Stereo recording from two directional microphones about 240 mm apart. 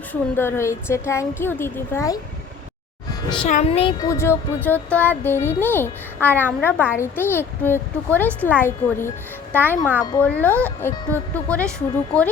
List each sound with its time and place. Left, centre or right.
0.1 s speech: centre
3.2 s a child's voice: left